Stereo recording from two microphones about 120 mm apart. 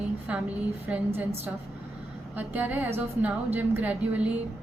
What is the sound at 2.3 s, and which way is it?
A woman's voice, 15° right (ahead or behind).